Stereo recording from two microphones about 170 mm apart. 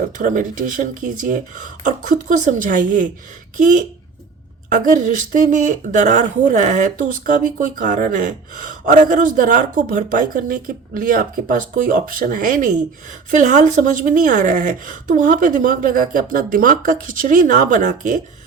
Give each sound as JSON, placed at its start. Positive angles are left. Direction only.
{"t": 0.0, "sound": "speech", "side_deg": -50}